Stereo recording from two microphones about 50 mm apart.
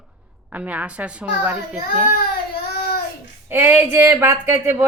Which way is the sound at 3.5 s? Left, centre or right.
Right.